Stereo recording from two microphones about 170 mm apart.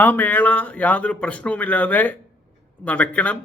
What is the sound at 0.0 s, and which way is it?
Speech, 10° left (ahead or behind).